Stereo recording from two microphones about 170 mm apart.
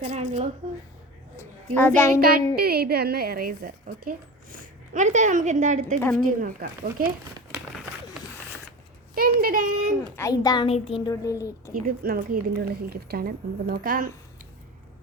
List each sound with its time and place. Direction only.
0.0 s a sound: 40° right (ahead or behind)
1.4 s a sound: 15° left (ahead or behind)
2.0 s music: 15° left (ahead or behind)
2.6 s a woman's voice: 65° right (ahead or behind)
9.1 s a woman's voice: 55° right (ahead or behind)
10.2 s a woman's voice: 20° left (ahead or behind)
11.7 s a woman's voice: 60° right (ahead or behind)